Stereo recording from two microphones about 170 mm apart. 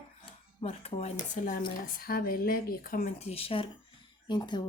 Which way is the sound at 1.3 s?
50° left (ahead or behind).